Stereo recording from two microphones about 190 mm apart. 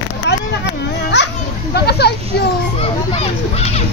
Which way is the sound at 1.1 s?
65° left (ahead or behind).